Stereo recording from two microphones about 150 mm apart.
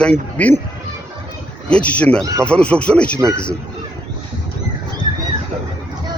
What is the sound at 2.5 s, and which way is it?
Speech, 5° left (ahead or behind).